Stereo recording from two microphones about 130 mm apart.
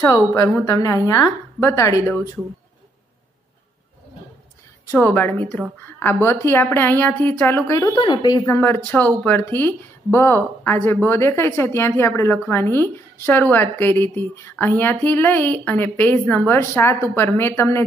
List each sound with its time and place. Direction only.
0.0 s a woman's voice: 25° left (ahead or behind)
4.9 s speech: 15° left (ahead or behind)
7.9 s speech: 35° left (ahead or behind)
8.5 s a woman's voice: 15° left (ahead or behind)